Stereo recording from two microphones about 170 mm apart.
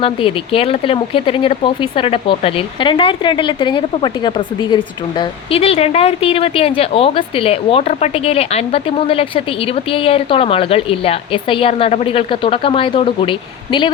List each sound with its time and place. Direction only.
0.0 s speech: 30° left (ahead or behind)